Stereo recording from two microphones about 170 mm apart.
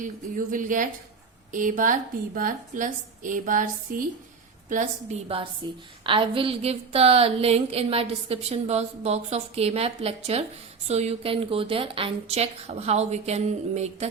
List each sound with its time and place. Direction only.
0.0 s a woman's voice: 50° right (ahead or behind)